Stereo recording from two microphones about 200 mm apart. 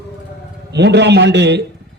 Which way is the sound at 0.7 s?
60° right (ahead or behind).